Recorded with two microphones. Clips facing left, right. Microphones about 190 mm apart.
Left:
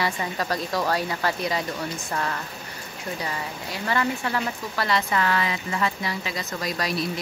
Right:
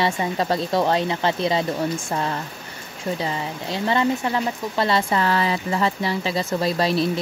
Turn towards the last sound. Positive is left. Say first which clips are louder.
# right 7 dB
turn(degrees=-30)  # may be behind; listen again after turning